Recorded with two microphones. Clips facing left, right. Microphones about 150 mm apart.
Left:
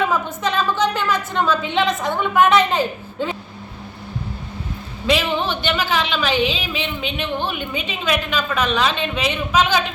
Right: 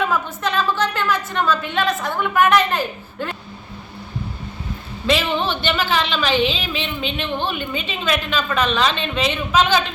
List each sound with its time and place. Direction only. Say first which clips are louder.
0.0 s a sound: left 1 dB; 15° left (ahead or behind)
1.7 s a woman's voice: left 2 dB; 15° left (ahead or behind)
5.0 s a woman's voice: even; 10° left (ahead or behind)